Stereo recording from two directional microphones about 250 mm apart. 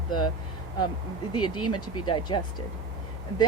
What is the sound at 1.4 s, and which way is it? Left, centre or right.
Speech, left.